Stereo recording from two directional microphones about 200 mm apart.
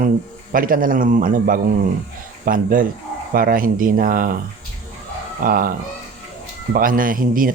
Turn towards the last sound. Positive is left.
turn(degrees=-45)  # may be behind; listen again after turning